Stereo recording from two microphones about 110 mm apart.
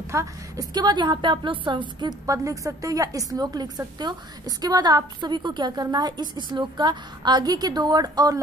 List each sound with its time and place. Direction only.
0.1 s a woman's voice: 25° right (ahead or behind)
0.7 s a woman's voice: 40° right (ahead or behind)